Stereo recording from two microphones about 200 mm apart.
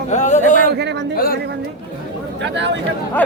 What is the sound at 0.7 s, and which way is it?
Speech, 60° right (ahead or behind).